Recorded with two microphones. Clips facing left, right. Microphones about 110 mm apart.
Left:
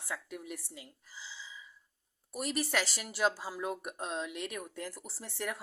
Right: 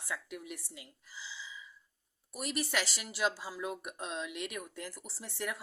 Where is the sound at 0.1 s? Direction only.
35° left (ahead or behind).